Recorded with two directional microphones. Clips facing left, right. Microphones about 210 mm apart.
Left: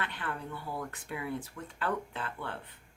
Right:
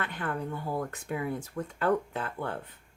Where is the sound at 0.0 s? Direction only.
45° right (ahead or behind).